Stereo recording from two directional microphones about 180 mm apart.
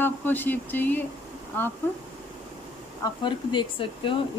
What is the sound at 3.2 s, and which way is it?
Speech, 25° left (ahead or behind).